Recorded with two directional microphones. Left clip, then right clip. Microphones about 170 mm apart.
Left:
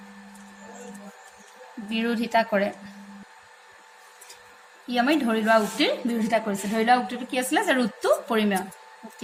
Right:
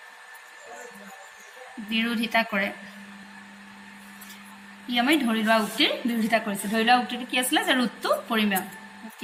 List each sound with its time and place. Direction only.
1.9 s a woman's voice: 60° left (ahead or behind)
4.9 s a woman's voice: 55° left (ahead or behind)